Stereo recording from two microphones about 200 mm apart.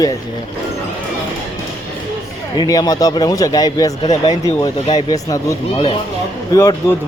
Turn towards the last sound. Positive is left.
turn(degrees=15)  # may be behind; listen again after turning